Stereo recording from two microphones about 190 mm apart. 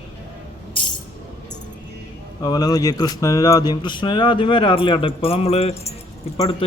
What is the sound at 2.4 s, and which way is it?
Speech, 20° left (ahead or behind).